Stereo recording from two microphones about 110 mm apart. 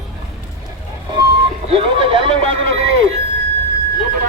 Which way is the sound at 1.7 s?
60° right (ahead or behind).